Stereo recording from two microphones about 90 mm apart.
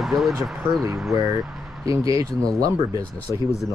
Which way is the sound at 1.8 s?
40° right (ahead or behind).